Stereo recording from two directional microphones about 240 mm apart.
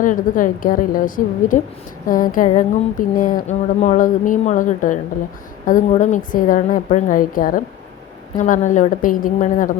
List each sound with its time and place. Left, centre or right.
0.0 s speech: left